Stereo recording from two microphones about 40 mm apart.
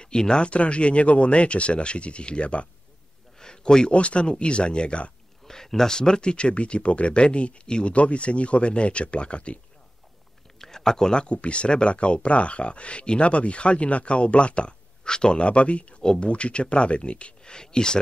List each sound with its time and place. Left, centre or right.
0.0 s speech: centre
0.5 s speech: left
3.3 s speech: centre
5.5 s speech: centre; by 9.6 s left
10.6 s speech: centre